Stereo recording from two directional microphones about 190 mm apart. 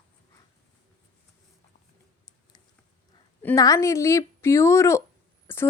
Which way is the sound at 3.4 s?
15° left (ahead or behind).